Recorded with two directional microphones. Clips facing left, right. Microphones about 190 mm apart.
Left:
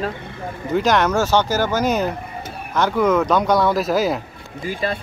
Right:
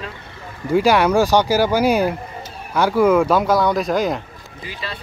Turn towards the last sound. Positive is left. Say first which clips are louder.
# left 8 dB
turn(degrees=50)  # may be behind; listen again after turning